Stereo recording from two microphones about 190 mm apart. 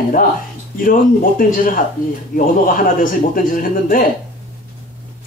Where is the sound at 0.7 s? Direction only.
45° left (ahead or behind).